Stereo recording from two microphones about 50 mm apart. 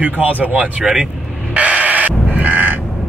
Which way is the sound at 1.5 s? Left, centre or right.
Right.